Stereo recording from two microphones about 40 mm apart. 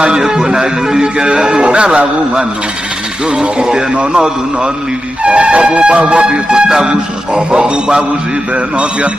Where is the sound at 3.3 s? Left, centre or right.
Right.